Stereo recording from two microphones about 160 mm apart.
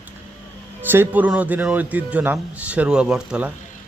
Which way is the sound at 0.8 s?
10° right (ahead or behind).